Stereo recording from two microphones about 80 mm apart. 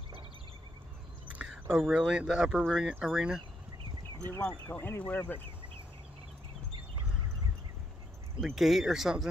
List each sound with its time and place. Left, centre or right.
1.4 s speech: centre
4.3 s speech: left
8.4 s speech: centre